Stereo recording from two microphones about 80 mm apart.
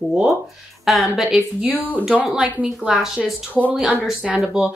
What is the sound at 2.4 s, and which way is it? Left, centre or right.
Speech, centre.